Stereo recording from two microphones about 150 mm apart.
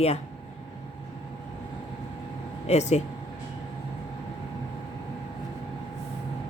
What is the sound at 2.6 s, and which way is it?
Speech, 50° left (ahead or behind).